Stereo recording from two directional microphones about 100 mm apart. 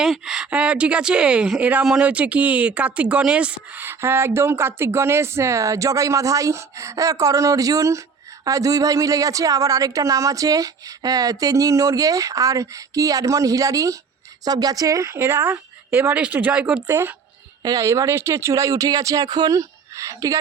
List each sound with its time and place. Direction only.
0.0 s speech: 5° right (ahead or behind)
16.9 s speech: 25° right (ahead or behind)
17.6 s speech: 35° right (ahead or behind)